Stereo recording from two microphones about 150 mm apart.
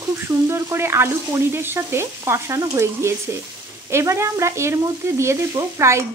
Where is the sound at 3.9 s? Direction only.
20° right (ahead or behind).